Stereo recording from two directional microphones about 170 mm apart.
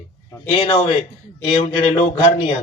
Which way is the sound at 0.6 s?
30° left (ahead or behind).